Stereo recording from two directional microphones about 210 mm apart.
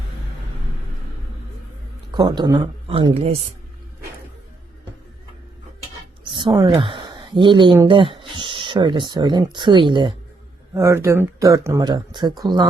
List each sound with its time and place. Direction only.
2.1 s speech: 20° right (ahead or behind)
6.3 s a sound: 20° right (ahead or behind)
6.7 s speech: 25° right (ahead or behind)